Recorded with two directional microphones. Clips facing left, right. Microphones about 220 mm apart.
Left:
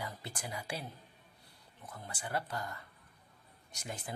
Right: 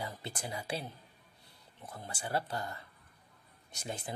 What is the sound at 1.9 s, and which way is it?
Speech, 30° right (ahead or behind).